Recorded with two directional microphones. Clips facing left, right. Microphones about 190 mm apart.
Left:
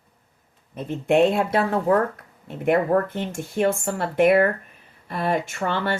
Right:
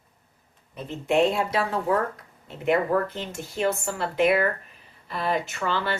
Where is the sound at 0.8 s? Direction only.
55° left (ahead or behind).